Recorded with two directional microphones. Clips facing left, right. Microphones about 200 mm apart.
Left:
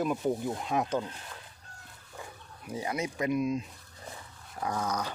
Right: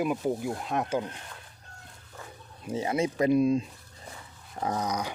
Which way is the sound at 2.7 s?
25° right (ahead or behind).